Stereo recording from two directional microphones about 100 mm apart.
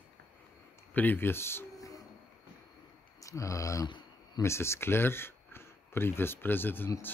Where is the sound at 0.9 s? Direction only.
20° left (ahead or behind).